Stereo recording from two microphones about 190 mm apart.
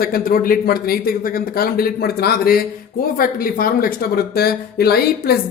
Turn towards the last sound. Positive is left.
turn(degrees=55)  # may be behind; listen again after turning